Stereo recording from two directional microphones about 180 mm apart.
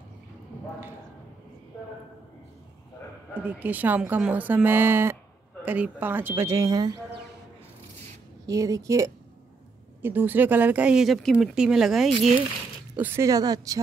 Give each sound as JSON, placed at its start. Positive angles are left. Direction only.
{"t": 3.3, "sound": "speech", "side_deg": -10}
{"t": 8.5, "sound": "a woman's voice", "side_deg": -20}
{"t": 12.9, "sound": "speech", "side_deg": -10}